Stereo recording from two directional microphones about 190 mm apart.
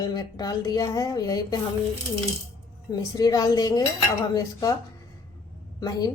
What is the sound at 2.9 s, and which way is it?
A woman's voice, 20° left (ahead or behind).